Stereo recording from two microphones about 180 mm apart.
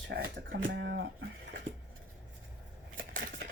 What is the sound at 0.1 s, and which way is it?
Speech, 80° right.